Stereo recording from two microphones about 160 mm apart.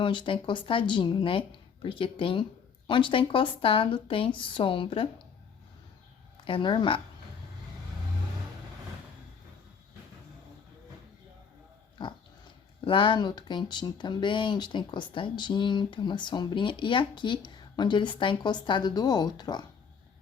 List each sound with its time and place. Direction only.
0.0 s speech: 30° left (ahead or behind)
6.4 s speech: 30° left (ahead or behind)
12.0 s dog: 30° left (ahead or behind)
12.8 s speech: 30° left (ahead or behind)